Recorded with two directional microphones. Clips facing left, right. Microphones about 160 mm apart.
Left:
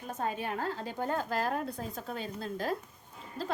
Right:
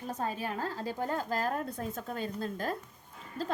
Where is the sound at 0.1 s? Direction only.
35° right (ahead or behind).